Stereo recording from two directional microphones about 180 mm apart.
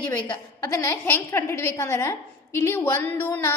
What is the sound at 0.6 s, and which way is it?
A woman's voice, 15° left (ahead or behind).